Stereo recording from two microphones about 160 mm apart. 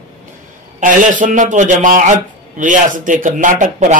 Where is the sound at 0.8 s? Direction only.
55° right (ahead or behind).